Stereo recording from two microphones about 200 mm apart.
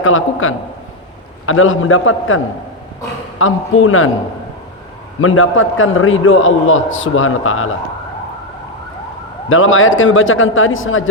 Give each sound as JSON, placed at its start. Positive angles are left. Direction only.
{"t": 0.0, "sound": "a man's voice", "side_deg": 90}
{"t": 5.2, "sound": "a man's voice", "side_deg": 90}
{"t": 9.5, "sound": "a man's voice", "side_deg": 85}